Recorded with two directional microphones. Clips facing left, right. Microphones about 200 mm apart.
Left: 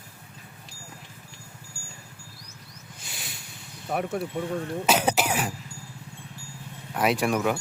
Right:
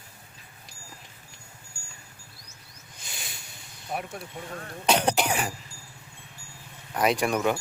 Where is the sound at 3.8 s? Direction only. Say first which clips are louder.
Left 7 dB; 55° left (ahead or behind).